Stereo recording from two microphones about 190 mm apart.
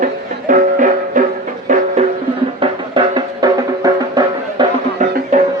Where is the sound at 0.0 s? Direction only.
45° right (ahead or behind).